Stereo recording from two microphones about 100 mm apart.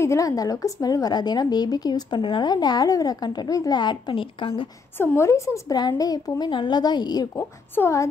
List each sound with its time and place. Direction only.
0.0 s a woman's voice: 30° left (ahead or behind); by 4.6 s 60° left (ahead or behind)
4.9 s a woman's voice: 25° left (ahead or behind)
5.8 s a woman's voice: 40° left (ahead or behind)
7.3 s a woman's voice: 25° left (ahead or behind)